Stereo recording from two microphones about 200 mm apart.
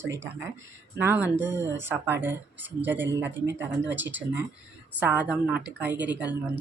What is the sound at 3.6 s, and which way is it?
Speech, 10° right (ahead or behind).